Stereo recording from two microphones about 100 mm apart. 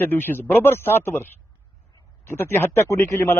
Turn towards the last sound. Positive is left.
turn(degrees=25)  # may be behind; listen again after turning